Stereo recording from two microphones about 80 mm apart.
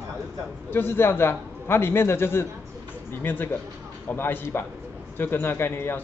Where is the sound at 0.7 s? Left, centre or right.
Left.